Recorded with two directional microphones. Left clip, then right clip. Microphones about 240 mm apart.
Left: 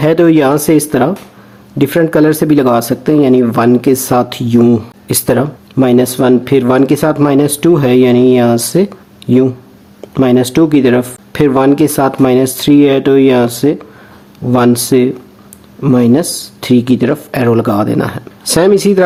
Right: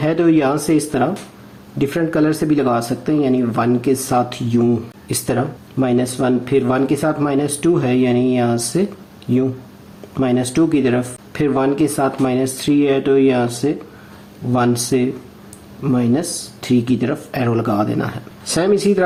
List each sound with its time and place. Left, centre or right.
0.0 s speech: left